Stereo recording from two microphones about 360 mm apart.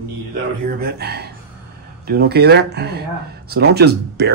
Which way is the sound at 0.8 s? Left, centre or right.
Right.